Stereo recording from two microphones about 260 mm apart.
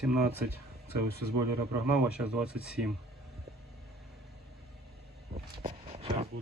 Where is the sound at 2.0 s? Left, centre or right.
Centre.